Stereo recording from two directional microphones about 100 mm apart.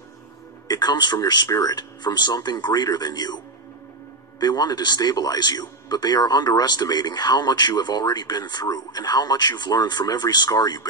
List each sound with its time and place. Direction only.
0.7 s speech: 45° left (ahead or behind)
4.4 s speech: 40° left (ahead or behind)